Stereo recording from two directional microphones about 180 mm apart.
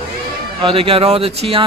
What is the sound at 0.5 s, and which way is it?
Speech, 30° right (ahead or behind).